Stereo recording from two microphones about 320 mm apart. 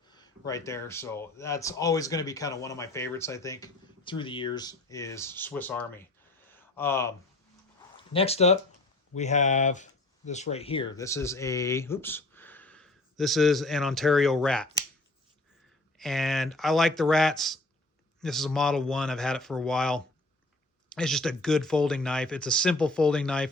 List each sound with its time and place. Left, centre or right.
0.1 s speech: centre
7.8 s a sound: centre
9.1 s speech: left; by 14.7 s centre
16.0 s speech: centre